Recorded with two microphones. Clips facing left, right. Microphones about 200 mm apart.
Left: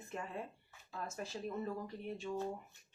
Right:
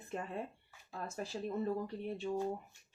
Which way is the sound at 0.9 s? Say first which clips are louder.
Right 2 dB; 30° right (ahead or behind).